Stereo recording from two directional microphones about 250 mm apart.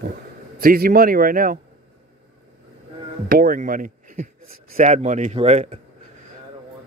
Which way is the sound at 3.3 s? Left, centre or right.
Right.